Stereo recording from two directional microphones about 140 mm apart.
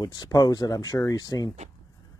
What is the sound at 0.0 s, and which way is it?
Speech, 25° left (ahead or behind).